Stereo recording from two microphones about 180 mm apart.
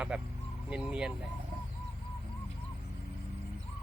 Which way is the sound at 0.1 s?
5° right (ahead or behind).